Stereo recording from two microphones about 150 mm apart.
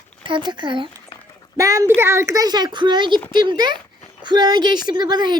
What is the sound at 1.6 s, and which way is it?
Speech, 20° right (ahead or behind).